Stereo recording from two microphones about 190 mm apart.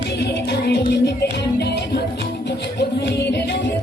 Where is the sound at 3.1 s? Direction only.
60° left (ahead or behind).